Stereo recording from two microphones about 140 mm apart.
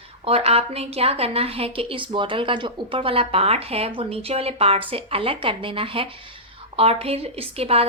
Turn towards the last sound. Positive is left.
turn(degrees=-45)  # may be behind; listen again after turning